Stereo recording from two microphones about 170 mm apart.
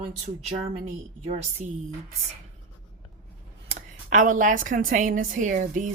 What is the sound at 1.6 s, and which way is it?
Speech, 45° right (ahead or behind).